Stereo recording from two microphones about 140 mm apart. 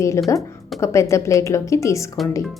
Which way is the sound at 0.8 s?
20° left (ahead or behind).